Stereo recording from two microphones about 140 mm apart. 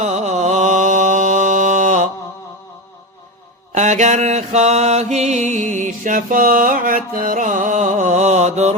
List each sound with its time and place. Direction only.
0.0 s music: 55° right (ahead or behind)
3.7 s mantra: 60° right (ahead or behind)